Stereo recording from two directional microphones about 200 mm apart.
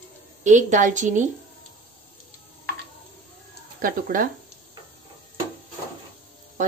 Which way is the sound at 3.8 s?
45° right (ahead or behind).